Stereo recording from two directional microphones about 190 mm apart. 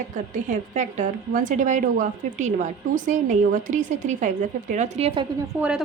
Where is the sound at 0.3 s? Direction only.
40° right (ahead or behind).